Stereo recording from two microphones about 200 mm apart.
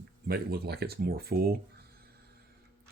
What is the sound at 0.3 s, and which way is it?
Speech, 50° right (ahead or behind).